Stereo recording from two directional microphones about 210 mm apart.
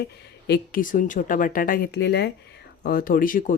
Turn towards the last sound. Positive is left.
turn(degrees=40)  # may be behind; listen again after turning